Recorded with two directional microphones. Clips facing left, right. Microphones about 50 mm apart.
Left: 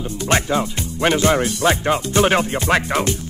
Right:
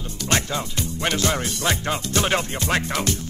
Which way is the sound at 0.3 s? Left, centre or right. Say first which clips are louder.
Left 5 dB; left.